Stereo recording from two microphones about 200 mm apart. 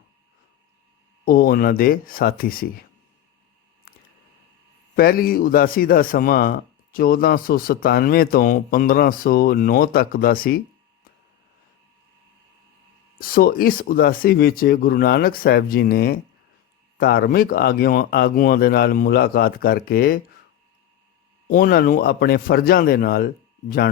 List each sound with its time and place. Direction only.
1.2 s a man's voice: 45° left (ahead or behind)
4.9 s a man's voice: 45° left (ahead or behind)
13.1 s a man's voice: 45° left (ahead or behind)
21.4 s a man's voice: 45° left (ahead or behind)